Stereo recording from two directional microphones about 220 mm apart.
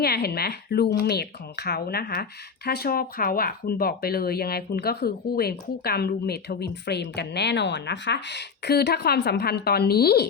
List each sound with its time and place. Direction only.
0.0 s speech: 45° left (ahead or behind)